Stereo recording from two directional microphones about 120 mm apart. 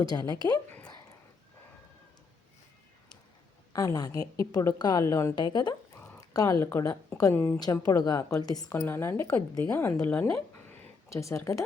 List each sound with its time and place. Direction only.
0.0 s a woman's voice: 35° left (ahead or behind)
3.7 s a woman's voice: 30° left (ahead or behind)
5.4 s a woman's voice: 40° left (ahead or behind)
6.1 s a sound: 30° left (ahead or behind)
6.7 s a woman's voice: 20° left (ahead or behind)
7.3 s a woman's voice: 15° left (ahead or behind)
7.9 s a woman's voice: 35° left (ahead or behind)
8.7 s a woman's voice: 20° left (ahead or behind)